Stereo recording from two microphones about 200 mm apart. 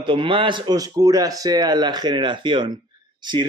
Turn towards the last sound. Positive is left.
turn(degrees=-25)  # may be behind; listen again after turning